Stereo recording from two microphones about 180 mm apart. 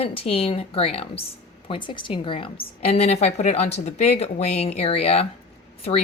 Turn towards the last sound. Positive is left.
turn(degrees=35)  # may be behind; listen again after turning